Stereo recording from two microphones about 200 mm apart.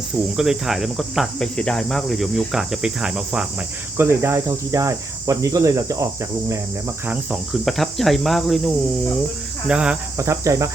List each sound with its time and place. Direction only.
0.3 s cricket: 5° right (ahead or behind)
7.1 s cricket: 5° right (ahead or behind)